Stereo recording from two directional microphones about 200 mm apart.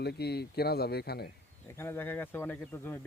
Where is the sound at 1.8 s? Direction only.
10° left (ahead or behind).